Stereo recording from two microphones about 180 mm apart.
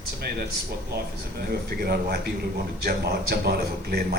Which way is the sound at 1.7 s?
60° right (ahead or behind).